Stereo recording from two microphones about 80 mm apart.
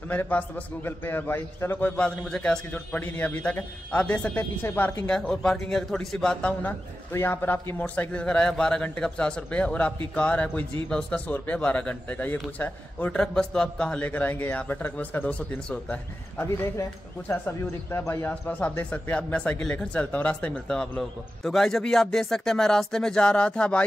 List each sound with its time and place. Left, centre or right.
0.1 s a man's voice: left
2.0 s a man's voice: centre
4.6 s a man's voice: left
5.1 s a man's voice: centre
6.6 s a man's voice: left
13.1 s a man's voice: centre
16.3 s speech: left
18.3 s a man's voice: centre